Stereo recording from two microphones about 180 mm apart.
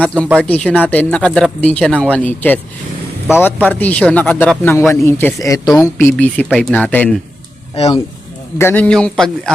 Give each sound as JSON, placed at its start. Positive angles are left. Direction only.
{"t": 0.0, "sound": "speech", "side_deg": 5}
{"t": 8.5, "sound": "a man's voice", "side_deg": 10}